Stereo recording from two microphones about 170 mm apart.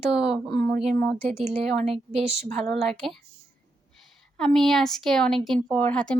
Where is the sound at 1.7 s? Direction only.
Centre (ahead or behind).